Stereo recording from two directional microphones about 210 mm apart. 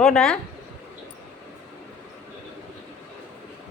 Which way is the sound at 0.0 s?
5° left (ahead or behind).